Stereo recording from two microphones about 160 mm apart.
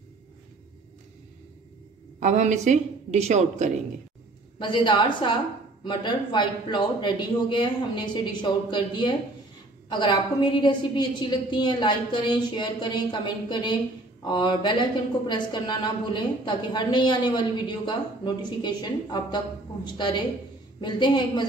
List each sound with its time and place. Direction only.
2.1 s a woman's voice: 50° right (ahead or behind)
4.6 s speech: 30° left (ahead or behind)